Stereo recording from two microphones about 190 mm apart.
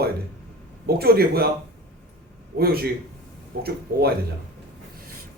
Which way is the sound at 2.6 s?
55° right (ahead or behind).